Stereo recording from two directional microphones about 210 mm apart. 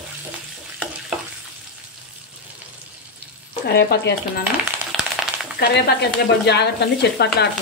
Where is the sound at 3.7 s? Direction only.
50° left (ahead or behind).